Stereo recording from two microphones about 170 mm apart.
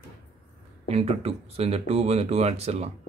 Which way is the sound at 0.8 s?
35° right (ahead or behind).